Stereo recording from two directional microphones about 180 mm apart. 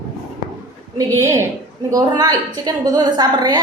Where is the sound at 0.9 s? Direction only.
15° right (ahead or behind).